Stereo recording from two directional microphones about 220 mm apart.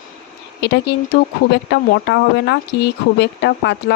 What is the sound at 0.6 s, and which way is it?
Speech, 50° left (ahead or behind).